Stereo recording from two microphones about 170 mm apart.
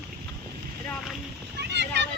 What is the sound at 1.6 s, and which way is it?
Speech, 85° right.